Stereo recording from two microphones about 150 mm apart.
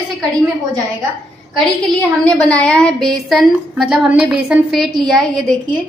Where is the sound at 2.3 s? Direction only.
10° left (ahead or behind).